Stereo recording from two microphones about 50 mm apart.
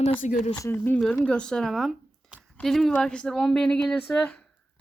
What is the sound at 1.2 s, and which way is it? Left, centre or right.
Speech, centre.